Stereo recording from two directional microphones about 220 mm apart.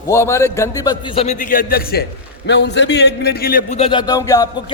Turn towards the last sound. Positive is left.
turn(degrees=15)  # may be behind; listen again after turning